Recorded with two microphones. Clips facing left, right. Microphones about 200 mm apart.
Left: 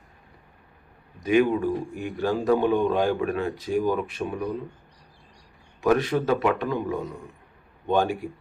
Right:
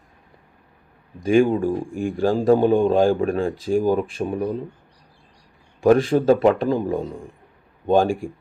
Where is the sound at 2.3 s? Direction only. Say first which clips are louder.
Right 5 dB; 30° right (ahead or behind).